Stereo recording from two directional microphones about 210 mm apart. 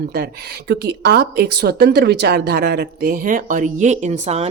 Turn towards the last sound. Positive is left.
turn(degrees=-30)  # may be behind; listen again after turning